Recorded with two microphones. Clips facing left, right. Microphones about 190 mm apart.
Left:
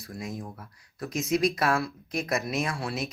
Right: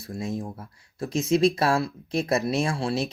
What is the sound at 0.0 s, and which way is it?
Speech, 25° right (ahead or behind).